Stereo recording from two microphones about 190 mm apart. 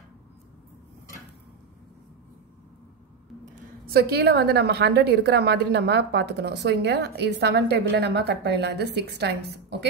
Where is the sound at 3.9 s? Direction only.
55° right (ahead or behind).